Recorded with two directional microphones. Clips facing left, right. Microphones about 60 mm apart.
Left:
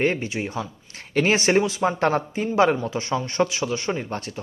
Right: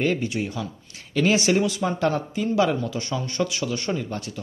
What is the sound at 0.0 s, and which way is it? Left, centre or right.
Speech, left.